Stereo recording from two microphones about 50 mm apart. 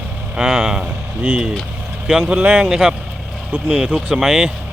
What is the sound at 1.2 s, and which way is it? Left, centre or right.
Speech, right.